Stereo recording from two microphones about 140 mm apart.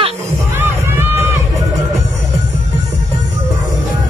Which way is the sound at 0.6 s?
15° right (ahead or behind).